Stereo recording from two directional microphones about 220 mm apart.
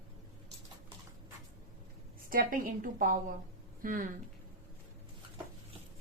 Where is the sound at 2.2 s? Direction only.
40° right (ahead or behind).